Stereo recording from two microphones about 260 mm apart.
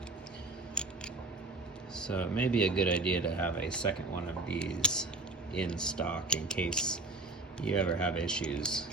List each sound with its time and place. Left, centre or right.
0.8 s scissors: centre
2.0 s speech: centre